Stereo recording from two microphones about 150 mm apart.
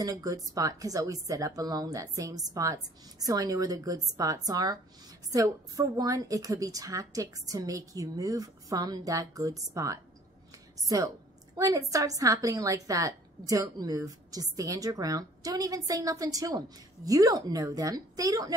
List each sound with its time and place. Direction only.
0.0 s a woman's voice: 25° right (ahead or behind)